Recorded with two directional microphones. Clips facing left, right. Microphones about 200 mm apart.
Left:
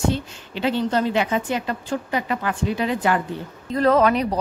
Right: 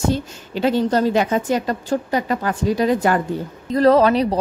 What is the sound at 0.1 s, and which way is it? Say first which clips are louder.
A woman's voice: right 4 dB; 40° right (ahead or behind).